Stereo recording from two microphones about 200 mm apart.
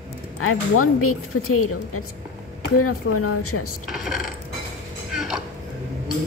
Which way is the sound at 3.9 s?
Centre (ahead or behind).